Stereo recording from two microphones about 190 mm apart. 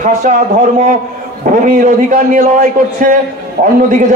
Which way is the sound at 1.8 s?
45° right (ahead or behind).